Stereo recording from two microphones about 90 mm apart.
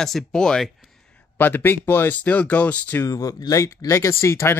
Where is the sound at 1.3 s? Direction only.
25° left (ahead or behind).